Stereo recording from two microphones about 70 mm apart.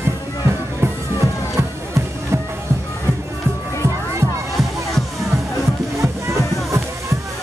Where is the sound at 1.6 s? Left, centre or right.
Right.